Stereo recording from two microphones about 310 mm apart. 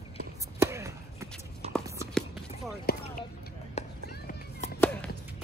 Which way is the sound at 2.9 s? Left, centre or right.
Left.